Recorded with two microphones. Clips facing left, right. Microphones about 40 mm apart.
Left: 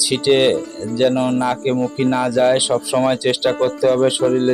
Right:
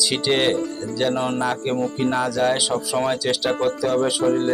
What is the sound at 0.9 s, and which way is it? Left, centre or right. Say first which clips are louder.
Speech: left 7 dB; centre.